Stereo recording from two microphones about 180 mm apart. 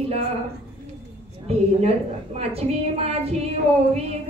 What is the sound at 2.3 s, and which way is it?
Music, 35° right (ahead or behind).